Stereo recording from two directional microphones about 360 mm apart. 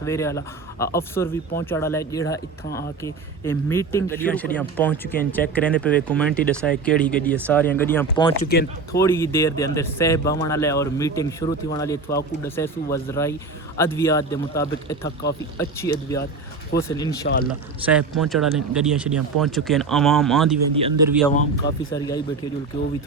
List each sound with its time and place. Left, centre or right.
0.0 s speech: centre
8.4 s speech: left
8.9 s speech: centre
16.7 s speech: centre
17.2 s speech: left
17.5 s speech: centre
20.7 s speech: centre
21.9 s speech: centre